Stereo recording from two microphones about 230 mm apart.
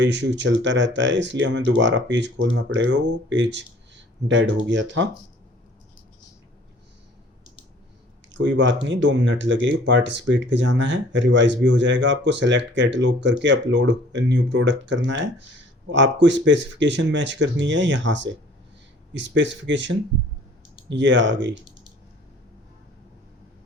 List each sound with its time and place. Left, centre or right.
0.0 s speech: right
8.3 s speech: right
20.9 s speech: right